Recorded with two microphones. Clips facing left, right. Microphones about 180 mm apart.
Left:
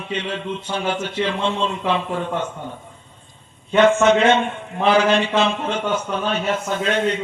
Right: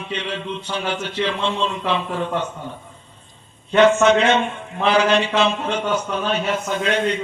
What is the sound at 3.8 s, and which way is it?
A man's voice, 55° left (ahead or behind).